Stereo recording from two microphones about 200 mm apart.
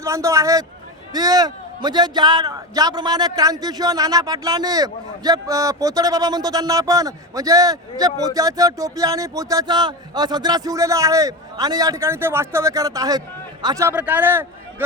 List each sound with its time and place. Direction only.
0.0 s a man's voice: 15° right (ahead or behind)